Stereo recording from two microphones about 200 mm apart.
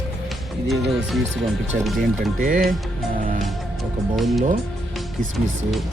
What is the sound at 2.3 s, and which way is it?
Speech, 45° right (ahead or behind).